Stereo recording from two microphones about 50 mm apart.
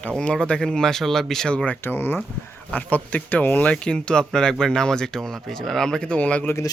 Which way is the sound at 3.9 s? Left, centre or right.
Centre.